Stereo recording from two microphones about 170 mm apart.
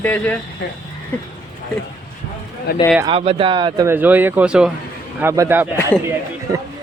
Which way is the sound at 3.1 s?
35° right (ahead or behind).